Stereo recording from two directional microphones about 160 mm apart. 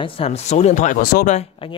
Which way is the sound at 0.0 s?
40° left (ahead or behind).